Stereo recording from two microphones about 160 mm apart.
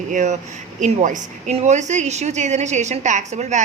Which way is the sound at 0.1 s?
50° right (ahead or behind).